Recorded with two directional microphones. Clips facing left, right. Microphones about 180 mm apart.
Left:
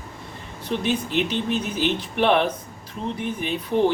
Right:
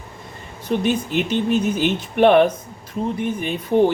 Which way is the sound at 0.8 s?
50° right (ahead or behind).